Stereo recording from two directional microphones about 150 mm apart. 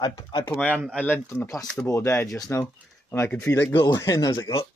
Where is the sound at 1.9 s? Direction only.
20° left (ahead or behind).